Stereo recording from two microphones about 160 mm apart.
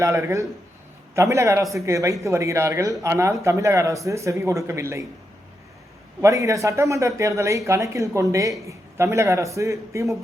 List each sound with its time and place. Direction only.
0.0 s speech: 20° right (ahead or behind)
6.2 s speech: 20° right (ahead or behind)